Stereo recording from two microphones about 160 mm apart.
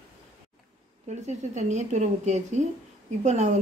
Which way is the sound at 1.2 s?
45° right (ahead or behind).